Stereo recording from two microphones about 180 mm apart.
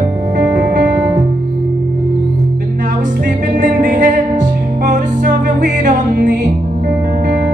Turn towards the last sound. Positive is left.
turn(degrees=-45)  # may be behind; listen again after turning